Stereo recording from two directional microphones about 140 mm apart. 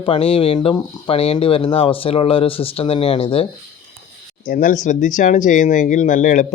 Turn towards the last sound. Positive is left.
turn(degrees=65)  # may be behind; listen again after turning